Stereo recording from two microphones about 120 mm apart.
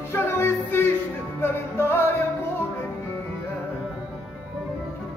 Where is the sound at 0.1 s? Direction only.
20° left (ahead or behind).